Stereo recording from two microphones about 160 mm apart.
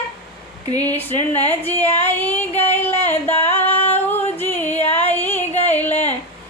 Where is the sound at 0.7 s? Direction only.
25° right (ahead or behind).